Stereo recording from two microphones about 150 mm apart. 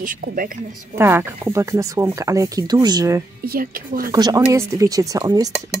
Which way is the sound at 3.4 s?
75° right (ahead or behind).